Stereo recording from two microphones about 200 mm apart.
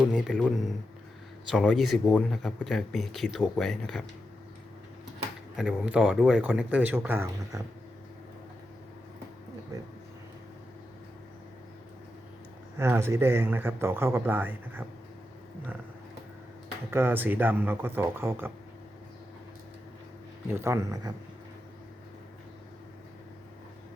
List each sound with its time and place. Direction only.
0.1 s speech: 5° left (ahead or behind)
5.5 s speech: 5° right (ahead or behind)
9.7 s speech: 15° right (ahead or behind)
12.8 s speech: 15° right (ahead or behind)
16.9 s speech: 10° right (ahead or behind)
20.5 s speech: 15° right (ahead or behind)